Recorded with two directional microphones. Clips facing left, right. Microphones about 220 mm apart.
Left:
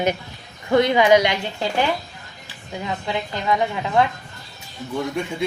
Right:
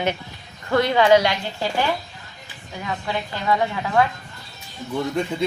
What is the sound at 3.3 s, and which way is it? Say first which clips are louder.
Speech: even; 20° left (ahead or behind).